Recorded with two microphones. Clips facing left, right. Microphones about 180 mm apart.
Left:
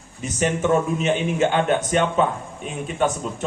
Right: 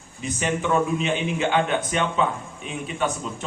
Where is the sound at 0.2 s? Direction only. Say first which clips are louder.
Left 3 dB; 45° left (ahead or behind).